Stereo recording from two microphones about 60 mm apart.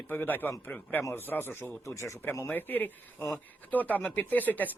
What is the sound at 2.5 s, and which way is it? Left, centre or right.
Speech, left.